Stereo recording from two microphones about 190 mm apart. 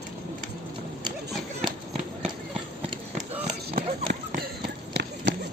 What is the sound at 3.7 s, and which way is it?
Run, 50° right (ahead or behind).